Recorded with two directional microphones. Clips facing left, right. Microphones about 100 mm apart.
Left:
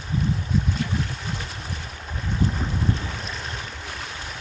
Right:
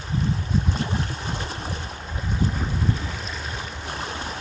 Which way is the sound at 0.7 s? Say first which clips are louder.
Even; 30° right (ahead or behind).